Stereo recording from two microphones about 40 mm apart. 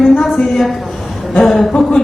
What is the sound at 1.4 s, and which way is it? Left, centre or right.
Speech, centre.